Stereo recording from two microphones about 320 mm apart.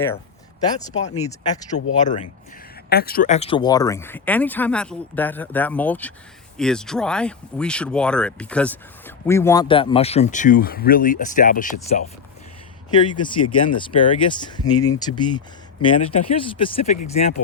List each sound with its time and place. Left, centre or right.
0.6 s speech: centre
1.7 s speech: left
13.1 s speech: centre
14.7 s speech: left
14.9 s speech: centre